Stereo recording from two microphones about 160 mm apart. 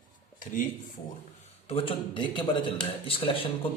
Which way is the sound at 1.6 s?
35° left (ahead or behind).